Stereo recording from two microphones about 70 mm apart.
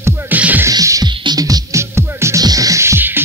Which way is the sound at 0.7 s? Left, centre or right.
Right.